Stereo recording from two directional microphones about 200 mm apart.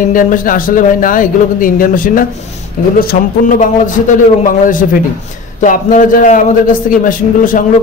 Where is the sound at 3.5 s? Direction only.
40° left (ahead or behind).